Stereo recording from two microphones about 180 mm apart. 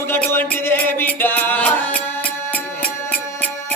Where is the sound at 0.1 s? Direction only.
10° left (ahead or behind).